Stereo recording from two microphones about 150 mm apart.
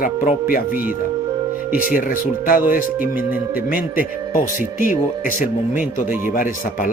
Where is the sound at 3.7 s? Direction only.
70° left (ahead or behind).